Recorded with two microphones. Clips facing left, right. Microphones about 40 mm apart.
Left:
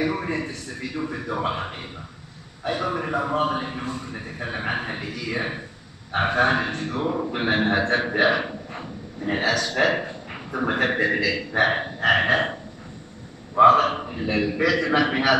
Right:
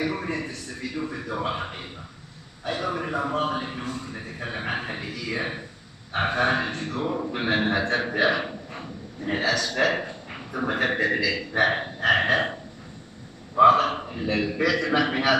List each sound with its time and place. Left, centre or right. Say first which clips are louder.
0.0 s a man's voice: left 3 dB; centre
7.2 s a man's voice: left 2 dB; centre
8.3 s a sound: left 2 dB; centre
9.5 s a man's voice: left 2 dB; centre
13.7 s a man's voice: left 3 dB; centre